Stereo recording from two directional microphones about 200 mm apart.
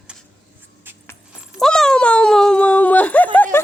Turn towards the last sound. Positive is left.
turn(degrees=10)  # may be behind; listen again after turning